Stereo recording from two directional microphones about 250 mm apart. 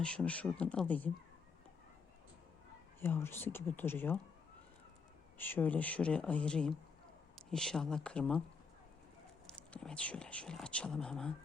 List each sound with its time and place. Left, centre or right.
0.0 s speech: centre
3.0 s speech: centre
5.4 s speech: centre
9.5 s speech: centre